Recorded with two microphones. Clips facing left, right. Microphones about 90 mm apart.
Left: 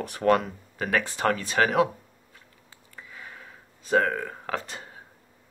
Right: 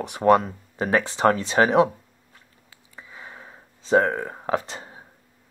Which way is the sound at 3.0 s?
25° right (ahead or behind).